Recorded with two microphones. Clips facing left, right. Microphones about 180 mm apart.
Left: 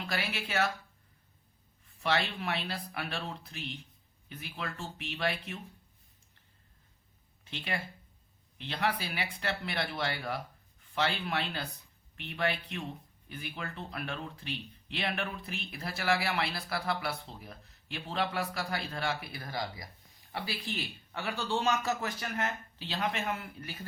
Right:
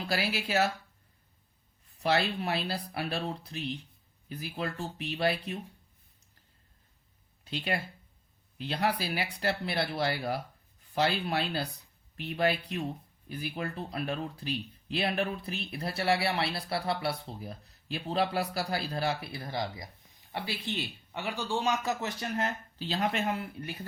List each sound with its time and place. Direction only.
0.1 s speech: 35° right (ahead or behind)
2.6 s speech: 35° right (ahead or behind)
8.6 s speech: 40° right (ahead or behind); by 22.1 s 15° right (ahead or behind)
22.2 s speech: 30° right (ahead or behind)